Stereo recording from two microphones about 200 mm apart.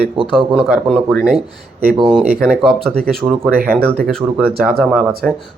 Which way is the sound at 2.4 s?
5° right (ahead or behind).